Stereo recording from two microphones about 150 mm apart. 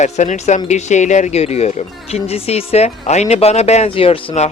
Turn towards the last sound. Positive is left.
turn(degrees=45)  # may be behind; listen again after turning